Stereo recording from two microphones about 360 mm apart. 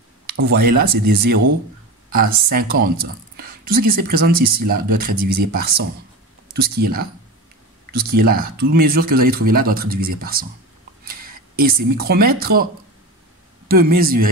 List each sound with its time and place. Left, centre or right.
0.3 s speech: right
13.7 s speech: right